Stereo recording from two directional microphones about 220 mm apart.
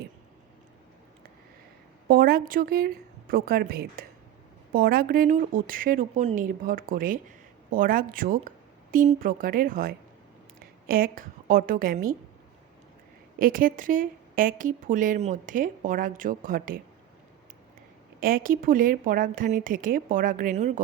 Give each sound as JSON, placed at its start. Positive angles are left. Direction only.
{"t": 2.0, "sound": "a woman's voice", "side_deg": -40}
{"t": 13.4, "sound": "a woman's voice", "side_deg": -40}
{"t": 18.2, "sound": "a woman's voice", "side_deg": -40}